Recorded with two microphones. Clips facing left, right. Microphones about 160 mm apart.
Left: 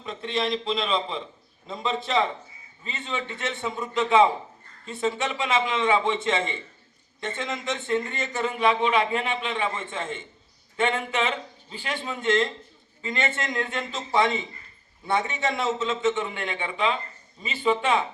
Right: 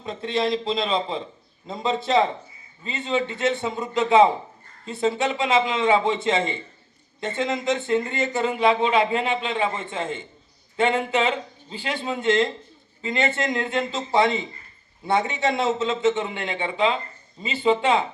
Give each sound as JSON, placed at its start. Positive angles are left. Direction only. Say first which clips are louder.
{"t": 0.0, "sound": "speech", "louder": "right 4 dB", "side_deg": -35}